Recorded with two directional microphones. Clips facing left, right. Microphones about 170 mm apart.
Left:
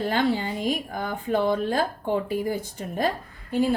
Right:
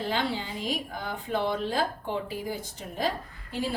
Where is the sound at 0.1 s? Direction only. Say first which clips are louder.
Left 7 dB; 50° left (ahead or behind).